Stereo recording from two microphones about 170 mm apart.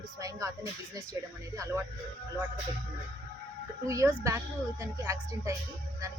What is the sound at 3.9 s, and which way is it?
Speech, 20° right (ahead or behind).